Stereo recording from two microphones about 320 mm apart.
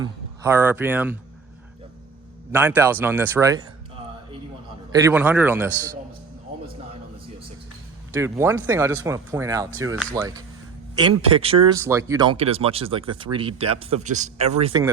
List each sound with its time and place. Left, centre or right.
0.0 s speech: centre
2.5 s speech: centre
4.9 s a man's voice: centre
8.1 s speech: centre